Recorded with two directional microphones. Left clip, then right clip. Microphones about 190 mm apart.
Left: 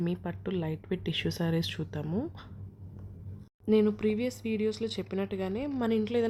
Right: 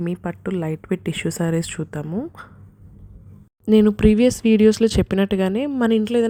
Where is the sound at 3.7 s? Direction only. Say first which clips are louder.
Right 10 dB; 50° right (ahead or behind).